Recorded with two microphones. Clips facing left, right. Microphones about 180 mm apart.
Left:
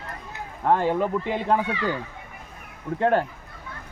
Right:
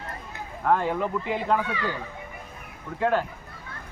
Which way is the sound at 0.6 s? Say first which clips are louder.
Left 2 dB; 25° left (ahead or behind).